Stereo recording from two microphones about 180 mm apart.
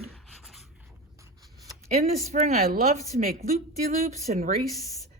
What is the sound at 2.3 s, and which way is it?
Speech, 40° right (ahead or behind).